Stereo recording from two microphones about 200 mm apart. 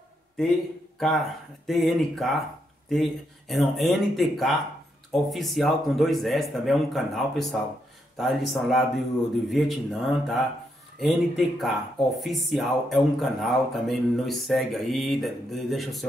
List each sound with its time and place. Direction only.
0.9 s speech: centre (ahead or behind)